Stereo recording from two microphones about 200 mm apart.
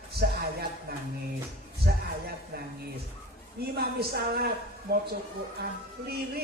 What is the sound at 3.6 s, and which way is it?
Speech, 50° right (ahead or behind).